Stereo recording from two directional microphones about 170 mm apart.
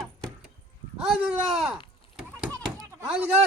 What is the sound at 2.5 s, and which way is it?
Chop, centre (ahead or behind).